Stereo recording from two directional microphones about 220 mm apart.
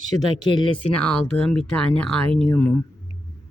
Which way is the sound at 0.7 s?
90° left.